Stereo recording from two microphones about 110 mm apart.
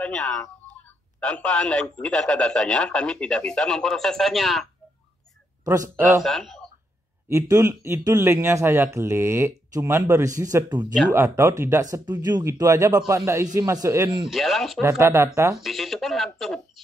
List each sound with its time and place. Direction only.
0.0 s a man's voice: 10° left (ahead or behind)
5.7 s speech: 25° right (ahead or behind)
6.2 s a man's voice: centre (ahead or behind)
7.2 s speech: 30° right (ahead or behind)
11.1 s speech: 25° right (ahead or behind)
14.3 s a man's voice: centre (ahead or behind)
14.8 s speech: 25° right (ahead or behind)
15.5 s speech: centre (ahead or behind)